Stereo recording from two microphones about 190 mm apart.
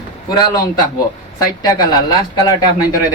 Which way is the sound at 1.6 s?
20° left (ahead or behind).